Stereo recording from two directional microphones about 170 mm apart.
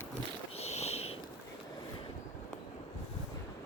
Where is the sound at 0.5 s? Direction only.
40° left (ahead or behind).